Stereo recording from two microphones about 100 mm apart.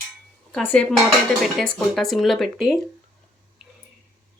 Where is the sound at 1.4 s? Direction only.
Centre (ahead or behind).